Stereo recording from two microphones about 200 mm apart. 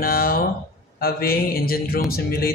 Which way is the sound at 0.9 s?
50° left (ahead or behind).